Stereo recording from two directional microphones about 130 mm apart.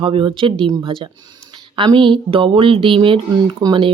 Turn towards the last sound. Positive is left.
turn(degrees=-40)  # may be behind; listen again after turning